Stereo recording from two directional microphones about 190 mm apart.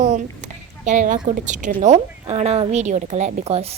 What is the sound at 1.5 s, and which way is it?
A woman's voice, 40° right (ahead or behind).